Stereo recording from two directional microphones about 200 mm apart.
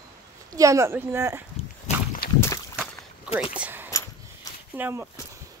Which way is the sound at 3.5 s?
10° right (ahead or behind).